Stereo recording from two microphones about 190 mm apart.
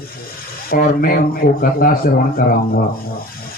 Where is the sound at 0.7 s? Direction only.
50° left (ahead or behind).